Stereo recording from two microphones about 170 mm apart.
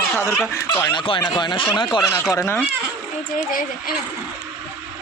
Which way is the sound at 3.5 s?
55° left (ahead or behind).